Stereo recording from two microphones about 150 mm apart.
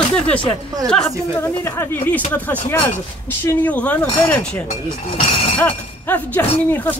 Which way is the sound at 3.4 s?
10° left (ahead or behind).